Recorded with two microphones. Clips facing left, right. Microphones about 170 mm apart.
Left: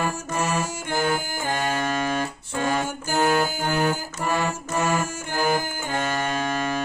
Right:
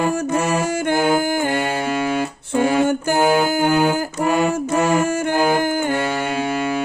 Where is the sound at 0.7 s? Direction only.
70° right (ahead or behind).